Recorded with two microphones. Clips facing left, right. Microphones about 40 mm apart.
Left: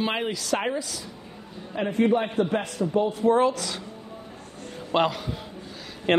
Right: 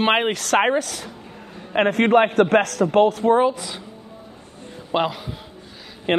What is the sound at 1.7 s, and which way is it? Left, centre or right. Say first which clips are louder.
A man's voice: right 7 dB; right.